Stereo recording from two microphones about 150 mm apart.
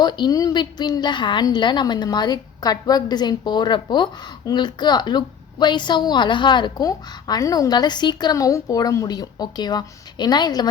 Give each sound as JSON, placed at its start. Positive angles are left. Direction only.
{"t": 0.0, "sound": "a woman's voice", "side_deg": 30}